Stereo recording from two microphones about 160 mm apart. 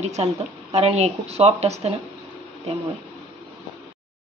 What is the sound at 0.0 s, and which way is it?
Speech, 40° right (ahead or behind).